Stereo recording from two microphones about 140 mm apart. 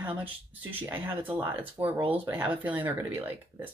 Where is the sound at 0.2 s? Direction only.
10° right (ahead or behind).